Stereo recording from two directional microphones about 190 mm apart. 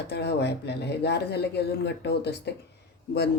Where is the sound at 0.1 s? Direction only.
60° left (ahead or behind).